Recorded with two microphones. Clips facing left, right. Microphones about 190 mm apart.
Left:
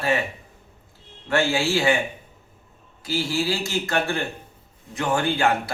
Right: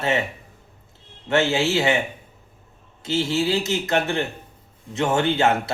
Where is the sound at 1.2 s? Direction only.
20° right (ahead or behind).